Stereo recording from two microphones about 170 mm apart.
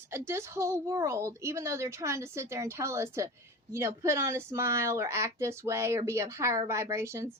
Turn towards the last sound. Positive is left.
turn(degrees=-15)  # may be behind; listen again after turning